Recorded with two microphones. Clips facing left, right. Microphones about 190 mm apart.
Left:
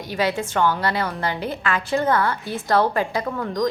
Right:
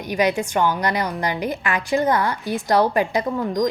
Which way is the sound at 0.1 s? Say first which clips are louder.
Right 3 dB; 15° right (ahead or behind).